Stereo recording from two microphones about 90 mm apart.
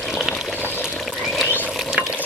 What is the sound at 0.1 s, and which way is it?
Pour, 5° right (ahead or behind).